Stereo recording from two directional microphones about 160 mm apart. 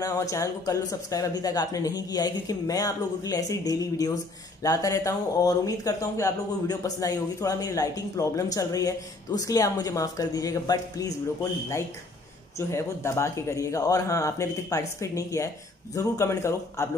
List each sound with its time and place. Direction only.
0.0 s speech: 20° left (ahead or behind)
12.5 s speech: 20° left (ahead or behind)